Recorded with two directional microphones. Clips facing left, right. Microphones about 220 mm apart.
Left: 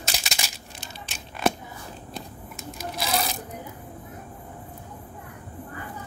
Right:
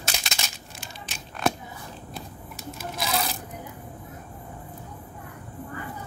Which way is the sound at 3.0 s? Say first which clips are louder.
Left 1 dB; centre (ahead or behind).